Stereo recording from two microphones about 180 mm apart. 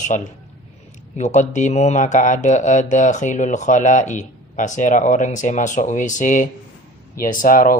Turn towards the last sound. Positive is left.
turn(degrees=50)  # may be behind; listen again after turning